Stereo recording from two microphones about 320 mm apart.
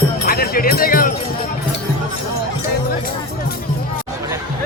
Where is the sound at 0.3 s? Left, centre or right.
Left.